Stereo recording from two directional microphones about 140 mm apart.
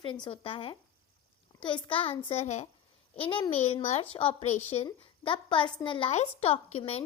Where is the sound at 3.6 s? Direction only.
50° left (ahead or behind); by 6.1 s 35° left (ahead or behind).